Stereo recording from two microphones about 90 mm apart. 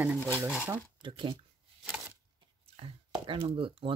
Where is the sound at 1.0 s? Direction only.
65° right (ahead or behind).